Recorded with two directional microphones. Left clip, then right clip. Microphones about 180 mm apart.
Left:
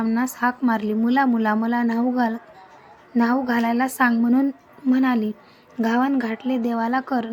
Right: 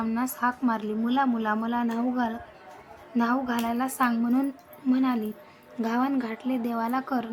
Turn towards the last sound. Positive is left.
turn(degrees=20)  # may be behind; listen again after turning